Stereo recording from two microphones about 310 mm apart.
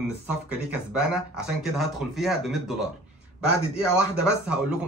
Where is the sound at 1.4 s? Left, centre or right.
Centre.